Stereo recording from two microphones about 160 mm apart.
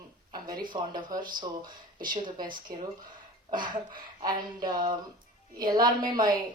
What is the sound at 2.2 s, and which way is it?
Speech, 30° right (ahead or behind).